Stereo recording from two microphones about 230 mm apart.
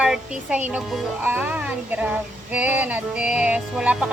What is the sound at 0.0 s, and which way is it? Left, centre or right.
A child's voice, centre.